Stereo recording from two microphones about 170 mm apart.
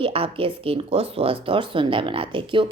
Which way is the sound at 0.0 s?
35° right (ahead or behind).